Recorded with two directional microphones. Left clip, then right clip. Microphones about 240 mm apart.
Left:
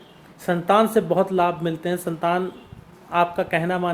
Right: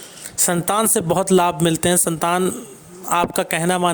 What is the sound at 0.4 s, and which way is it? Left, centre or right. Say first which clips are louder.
Speech: left 1 dB; right.